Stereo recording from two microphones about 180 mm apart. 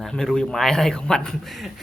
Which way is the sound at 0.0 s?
Centre (ahead or behind).